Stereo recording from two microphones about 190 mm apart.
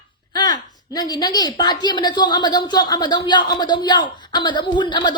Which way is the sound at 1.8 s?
20° left (ahead or behind).